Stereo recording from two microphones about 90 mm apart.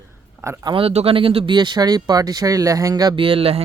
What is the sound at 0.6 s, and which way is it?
Speech, 80° right.